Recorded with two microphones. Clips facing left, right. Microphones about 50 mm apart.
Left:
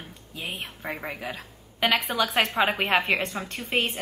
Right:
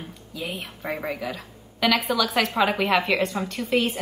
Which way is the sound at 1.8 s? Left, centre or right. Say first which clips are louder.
Right 2 dB; left.